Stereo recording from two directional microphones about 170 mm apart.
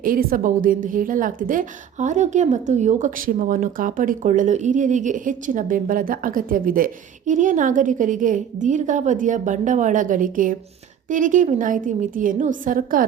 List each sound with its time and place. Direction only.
0.0 s a woman's voice: 55° right (ahead or behind)